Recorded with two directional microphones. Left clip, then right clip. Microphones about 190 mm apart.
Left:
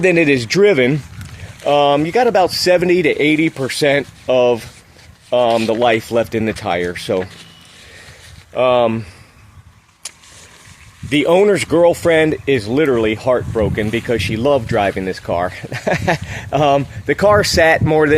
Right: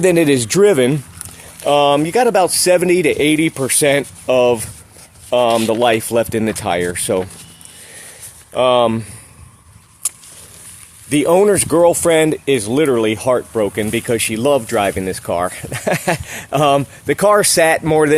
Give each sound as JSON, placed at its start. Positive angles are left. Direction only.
{"t": 0.0, "sound": "speech", "side_deg": -15}
{"t": 8.5, "sound": "speech", "side_deg": -15}
{"t": 11.1, "sound": "speech", "side_deg": -5}